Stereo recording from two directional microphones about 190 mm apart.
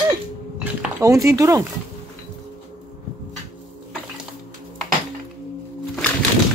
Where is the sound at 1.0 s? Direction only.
15° right (ahead or behind).